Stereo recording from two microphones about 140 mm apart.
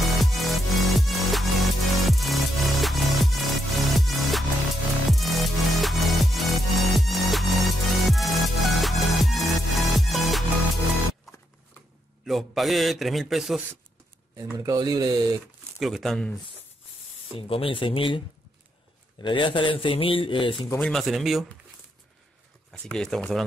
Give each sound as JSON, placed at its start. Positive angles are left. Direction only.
{"t": 0.2, "sound": "music", "side_deg": 0}
{"t": 12.3, "sound": "a man's voice", "side_deg": 0}
{"t": 14.3, "sound": "speech", "side_deg": -25}
{"t": 15.8, "sound": "a man's voice", "side_deg": 0}
{"t": 17.4, "sound": "a man's voice", "side_deg": 40}
{"t": 19.2, "sound": "a man's voice", "side_deg": 35}
{"t": 20.7, "sound": "a man's voice", "side_deg": 5}
{"t": 22.7, "sound": "a man's voice", "side_deg": 5}